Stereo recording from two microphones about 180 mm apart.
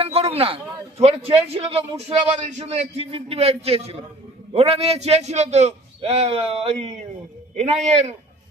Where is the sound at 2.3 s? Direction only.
40° right (ahead or behind).